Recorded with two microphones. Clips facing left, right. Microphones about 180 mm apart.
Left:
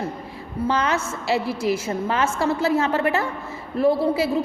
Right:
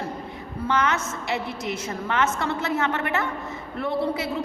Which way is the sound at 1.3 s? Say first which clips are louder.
Left 7 dB; 20° right (ahead or behind).